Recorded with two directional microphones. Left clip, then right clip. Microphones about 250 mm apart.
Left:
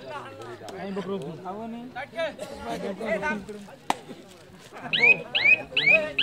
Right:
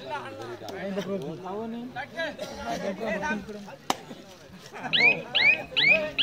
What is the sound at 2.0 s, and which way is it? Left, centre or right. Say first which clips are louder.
Speech: left 2 dB; centre.